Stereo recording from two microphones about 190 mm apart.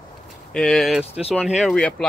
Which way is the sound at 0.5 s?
5° left (ahead or behind).